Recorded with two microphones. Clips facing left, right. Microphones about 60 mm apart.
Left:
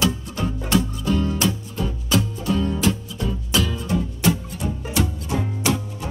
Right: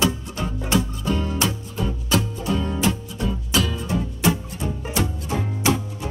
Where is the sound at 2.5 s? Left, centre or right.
Centre.